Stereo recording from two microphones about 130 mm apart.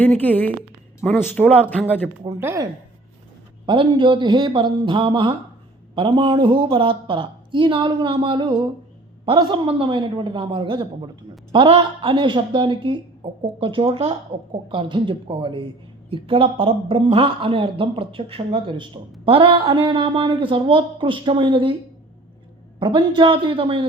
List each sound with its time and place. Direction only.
0.0 s speech: 10° left (ahead or behind)
2.4 s speech: 20° right (ahead or behind)
3.7 s a woman's voice: 40° right (ahead or behind)
22.8 s a woman's voice: 40° right (ahead or behind)